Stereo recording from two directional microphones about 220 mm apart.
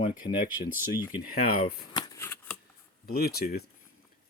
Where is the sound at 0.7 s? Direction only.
10° right (ahead or behind).